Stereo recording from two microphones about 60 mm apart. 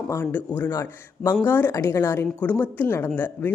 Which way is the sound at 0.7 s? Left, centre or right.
Left.